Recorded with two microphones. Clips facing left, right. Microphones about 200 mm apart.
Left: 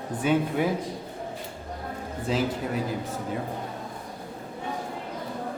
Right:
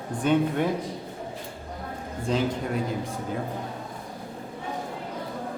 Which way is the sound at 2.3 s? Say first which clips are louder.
Right 1 dB; 5° left (ahead or behind).